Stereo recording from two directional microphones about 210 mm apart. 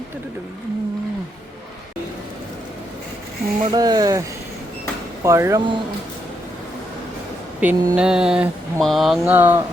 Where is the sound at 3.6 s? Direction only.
20° right (ahead or behind).